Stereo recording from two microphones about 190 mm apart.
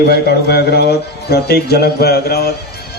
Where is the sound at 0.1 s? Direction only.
60° left (ahead or behind).